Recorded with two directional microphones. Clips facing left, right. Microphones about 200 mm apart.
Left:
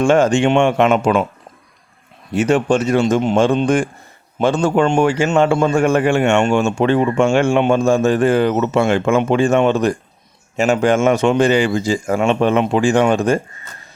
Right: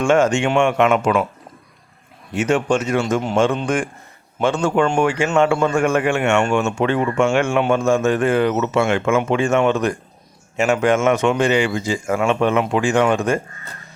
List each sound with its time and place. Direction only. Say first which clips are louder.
0.0 s a man's voice: left 3 dB; 35° left (ahead or behind)
2.3 s a man's voice: left 3 dB; 35° left (ahead or behind)
3.0 s speech: left 5 dB; 20° left (ahead or behind)
4.4 s a man's voice: left 3 dB; 35° left (ahead or behind)